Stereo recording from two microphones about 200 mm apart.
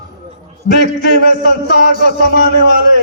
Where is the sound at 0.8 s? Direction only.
55° left (ahead or behind).